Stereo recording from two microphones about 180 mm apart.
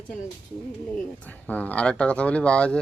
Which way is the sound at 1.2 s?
10° left (ahead or behind).